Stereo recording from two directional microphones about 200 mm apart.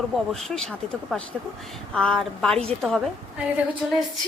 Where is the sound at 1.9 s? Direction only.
Centre (ahead or behind).